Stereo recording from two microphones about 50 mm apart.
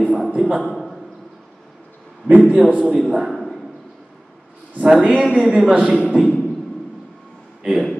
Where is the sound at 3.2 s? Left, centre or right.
Centre.